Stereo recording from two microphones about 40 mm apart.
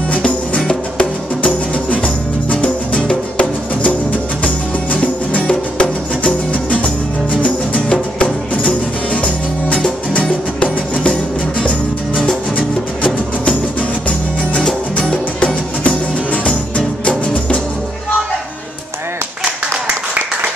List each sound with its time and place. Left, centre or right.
0.7 s music: left
6.5 s music: left
12.5 s music: left
15.0 s music: left